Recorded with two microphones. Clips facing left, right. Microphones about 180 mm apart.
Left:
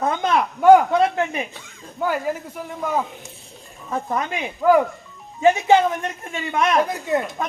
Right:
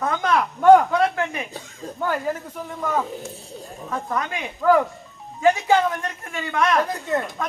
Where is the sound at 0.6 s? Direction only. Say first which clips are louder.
Left 1 dB; 10° left (ahead or behind).